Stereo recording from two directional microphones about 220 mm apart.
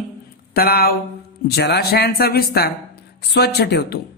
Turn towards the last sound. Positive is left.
turn(degrees=45)  # may be behind; listen again after turning